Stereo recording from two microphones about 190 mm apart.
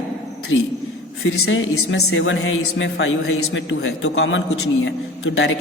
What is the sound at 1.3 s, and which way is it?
Speech, 75° left (ahead or behind).